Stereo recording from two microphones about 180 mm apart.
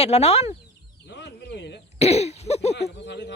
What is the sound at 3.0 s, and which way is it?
Speech, 75° left (ahead or behind).